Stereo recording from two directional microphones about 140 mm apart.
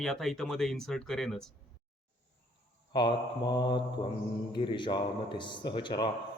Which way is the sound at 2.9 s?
30° left (ahead or behind).